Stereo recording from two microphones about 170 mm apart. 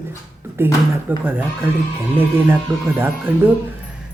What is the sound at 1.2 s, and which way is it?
Speech, 10° right (ahead or behind).